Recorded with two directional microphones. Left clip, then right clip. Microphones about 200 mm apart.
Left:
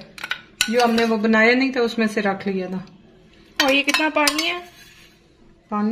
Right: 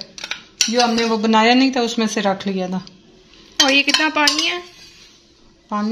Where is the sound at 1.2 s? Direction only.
25° right (ahead or behind).